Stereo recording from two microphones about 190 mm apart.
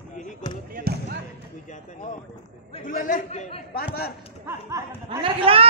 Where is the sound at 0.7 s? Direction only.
50° right (ahead or behind).